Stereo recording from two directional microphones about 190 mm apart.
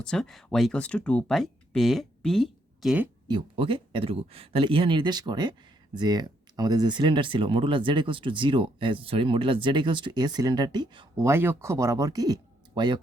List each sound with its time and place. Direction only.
0.0 s speech: 5° left (ahead or behind)
3.2 s speech: 25° right (ahead or behind)
11.3 s speech: 15° right (ahead or behind)